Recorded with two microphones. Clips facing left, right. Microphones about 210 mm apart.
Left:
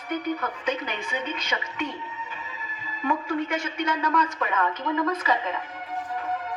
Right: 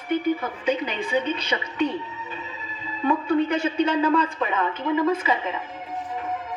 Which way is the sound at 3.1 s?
35° right (ahead or behind).